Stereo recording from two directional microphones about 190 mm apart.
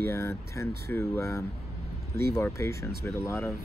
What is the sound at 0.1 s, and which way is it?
Speech, 15° left (ahead or behind).